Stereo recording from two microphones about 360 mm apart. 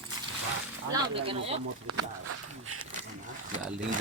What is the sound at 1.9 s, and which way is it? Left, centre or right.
Speech, right.